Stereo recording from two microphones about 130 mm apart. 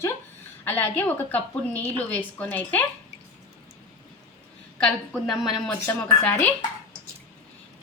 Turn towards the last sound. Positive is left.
turn(degrees=10)  # may be behind; listen again after turning